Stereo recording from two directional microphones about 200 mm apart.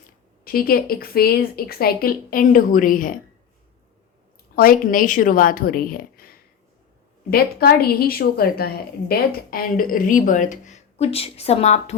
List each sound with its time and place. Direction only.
0.4 s a woman's voice: 50° left (ahead or behind)
4.5 s a woman's voice: 45° left (ahead or behind)
7.3 s a woman's voice: 50° left (ahead or behind); by 11.9 s 35° left (ahead or behind)